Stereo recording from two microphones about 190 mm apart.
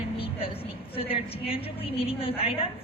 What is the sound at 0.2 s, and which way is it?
A woman's voice, 30° left (ahead or behind).